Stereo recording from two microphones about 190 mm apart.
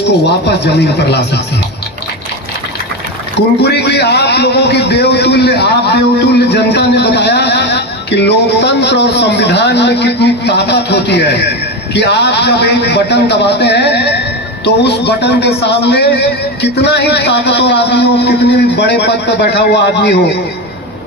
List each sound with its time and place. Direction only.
0.4 s a man's voice: 60° left (ahead or behind)
3.6 s a man's voice: 60° left (ahead or behind)